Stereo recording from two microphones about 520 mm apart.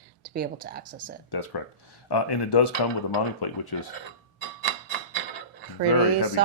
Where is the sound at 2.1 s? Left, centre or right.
Left.